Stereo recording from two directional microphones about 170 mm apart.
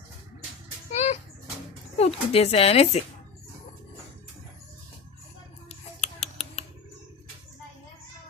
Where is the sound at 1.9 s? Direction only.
35° left (ahead or behind).